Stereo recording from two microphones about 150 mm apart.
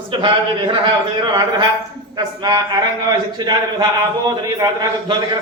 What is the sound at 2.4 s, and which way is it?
A man's voice, 25° right (ahead or behind).